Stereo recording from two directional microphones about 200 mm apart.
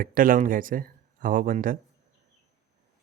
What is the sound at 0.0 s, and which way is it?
Speech, 45° right (ahead or behind).